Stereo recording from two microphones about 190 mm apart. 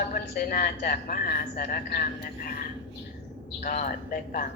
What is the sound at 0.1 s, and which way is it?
A woman's voice, 50° left (ahead or behind).